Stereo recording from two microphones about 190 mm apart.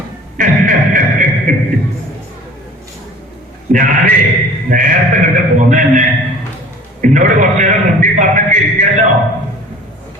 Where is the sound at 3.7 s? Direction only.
45° right (ahead or behind).